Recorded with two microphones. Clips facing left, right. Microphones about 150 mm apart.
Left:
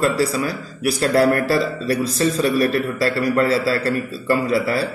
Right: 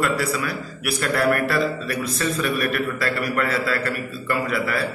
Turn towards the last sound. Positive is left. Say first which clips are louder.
# left 5 dB
turn(degrees=30)  # may be behind; listen again after turning